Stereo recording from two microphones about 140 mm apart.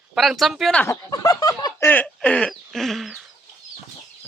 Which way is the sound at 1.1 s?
25° left (ahead or behind).